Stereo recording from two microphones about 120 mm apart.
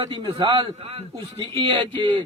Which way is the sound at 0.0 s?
40° right (ahead or behind).